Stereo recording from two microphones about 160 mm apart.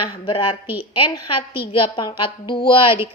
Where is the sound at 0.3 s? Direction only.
35° left (ahead or behind).